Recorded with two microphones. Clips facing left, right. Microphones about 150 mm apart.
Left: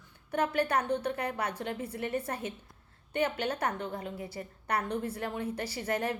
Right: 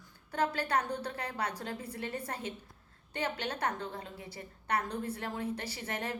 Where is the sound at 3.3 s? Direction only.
30° left (ahead or behind).